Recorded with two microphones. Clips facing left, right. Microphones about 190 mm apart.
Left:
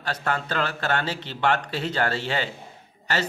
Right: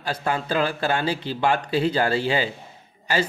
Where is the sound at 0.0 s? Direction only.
10° right (ahead or behind).